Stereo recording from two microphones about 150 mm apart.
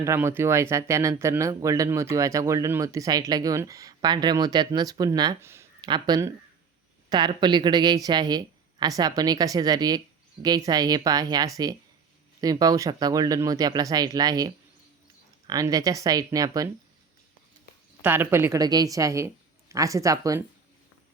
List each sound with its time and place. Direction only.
0.0 s speech: 15° right (ahead or behind)
5.4 s speech: 15° right (ahead or behind)
5.8 s speech: 30° right (ahead or behind)
18.0 s speech: 15° right (ahead or behind)